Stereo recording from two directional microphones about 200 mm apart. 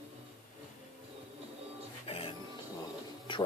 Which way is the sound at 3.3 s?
25° left (ahead or behind).